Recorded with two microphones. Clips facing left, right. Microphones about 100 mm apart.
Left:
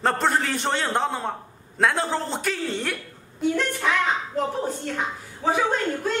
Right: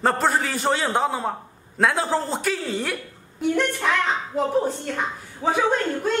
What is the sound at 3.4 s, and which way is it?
Speech, 15° right (ahead or behind).